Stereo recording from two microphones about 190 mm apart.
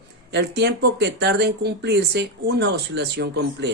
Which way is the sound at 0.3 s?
60° right (ahead or behind).